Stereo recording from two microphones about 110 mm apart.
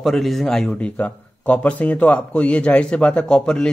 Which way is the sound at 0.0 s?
Centre (ahead or behind).